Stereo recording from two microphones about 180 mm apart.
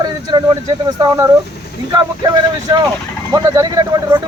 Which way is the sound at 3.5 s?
20° right (ahead or behind).